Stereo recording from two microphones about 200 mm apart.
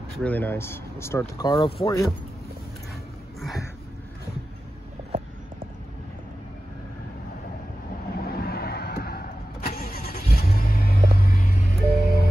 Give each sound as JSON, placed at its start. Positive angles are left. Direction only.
{"t": 0.2, "sound": "speech", "side_deg": 10}
{"t": 8.2, "sound": "vehicle", "side_deg": 50}